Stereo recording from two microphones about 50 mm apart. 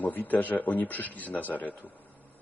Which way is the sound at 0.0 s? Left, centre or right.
Left.